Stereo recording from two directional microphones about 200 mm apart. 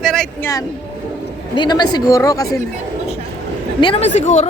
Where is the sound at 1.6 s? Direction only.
20° left (ahead or behind).